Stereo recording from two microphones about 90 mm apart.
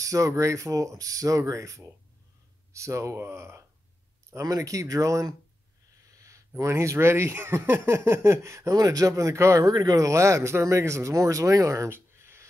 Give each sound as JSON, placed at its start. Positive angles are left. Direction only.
{"t": 0.0, "sound": "speech", "side_deg": -35}
{"t": 6.1, "sound": "a sound", "side_deg": -35}
{"t": 6.6, "sound": "speech", "side_deg": -30}